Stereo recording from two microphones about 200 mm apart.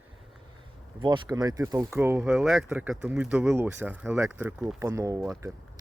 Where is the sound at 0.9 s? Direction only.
25° right (ahead or behind).